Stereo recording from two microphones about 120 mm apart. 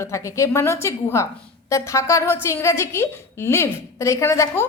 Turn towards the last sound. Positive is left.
turn(degrees=20)  # may be behind; listen again after turning